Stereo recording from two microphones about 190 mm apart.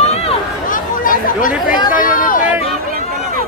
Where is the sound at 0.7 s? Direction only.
45° left (ahead or behind).